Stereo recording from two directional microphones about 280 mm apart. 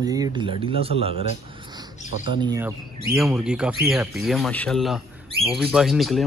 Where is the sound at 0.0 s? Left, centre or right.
Centre.